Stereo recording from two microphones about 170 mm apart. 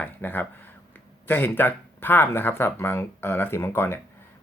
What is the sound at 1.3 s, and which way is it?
Speech, 10° left (ahead or behind).